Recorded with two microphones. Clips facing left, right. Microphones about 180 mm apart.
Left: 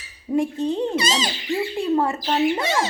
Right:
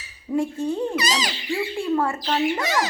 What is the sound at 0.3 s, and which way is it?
Speech, 20° left (ahead or behind).